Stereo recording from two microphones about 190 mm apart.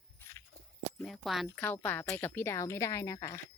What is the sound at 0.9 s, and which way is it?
Speech, centre (ahead or behind).